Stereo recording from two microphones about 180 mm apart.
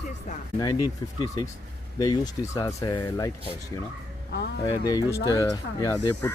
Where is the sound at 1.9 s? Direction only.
20° left (ahead or behind).